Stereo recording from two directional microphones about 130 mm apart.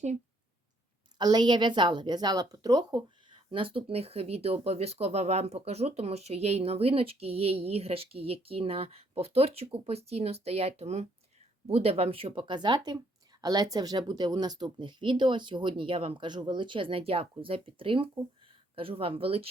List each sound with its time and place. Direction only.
1.2 s a woman's voice: 35° right (ahead or behind)